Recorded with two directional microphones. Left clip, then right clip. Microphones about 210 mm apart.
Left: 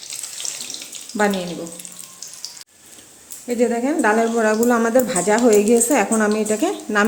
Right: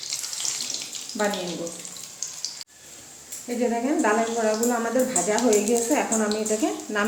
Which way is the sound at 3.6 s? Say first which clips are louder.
Left 5 dB; 55° left (ahead or behind).